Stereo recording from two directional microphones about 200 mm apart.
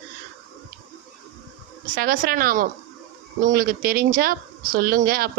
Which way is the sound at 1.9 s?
45° right (ahead or behind).